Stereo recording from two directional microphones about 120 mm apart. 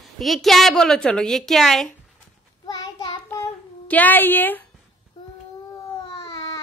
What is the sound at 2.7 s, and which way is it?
Child singing, 35° left (ahead or behind).